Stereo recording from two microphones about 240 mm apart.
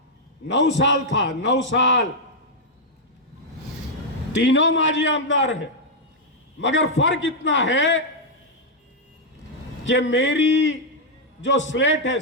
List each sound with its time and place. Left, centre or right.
0.4 s a man's voice: left
4.4 s a man's voice: left
9.8 s a man's voice: left